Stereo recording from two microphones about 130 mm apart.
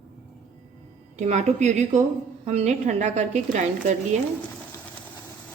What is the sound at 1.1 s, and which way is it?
Speech, 60° right (ahead or behind).